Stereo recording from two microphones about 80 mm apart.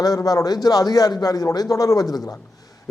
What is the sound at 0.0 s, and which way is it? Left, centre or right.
A man's voice, left.